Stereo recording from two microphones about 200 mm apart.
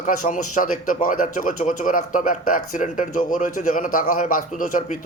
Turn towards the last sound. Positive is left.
turn(degrees=40)  # may be behind; listen again after turning